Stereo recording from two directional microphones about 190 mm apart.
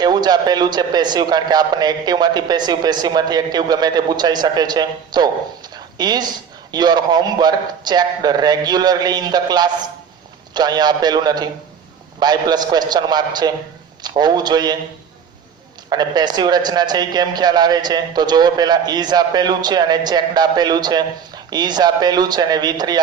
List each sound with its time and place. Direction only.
0.0 s a man's voice: 20° right (ahead or behind)
15.9 s a man's voice: 20° right (ahead or behind)